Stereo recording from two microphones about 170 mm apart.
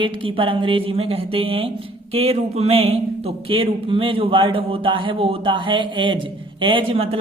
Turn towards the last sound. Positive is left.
turn(degrees=-30)  # may be behind; listen again after turning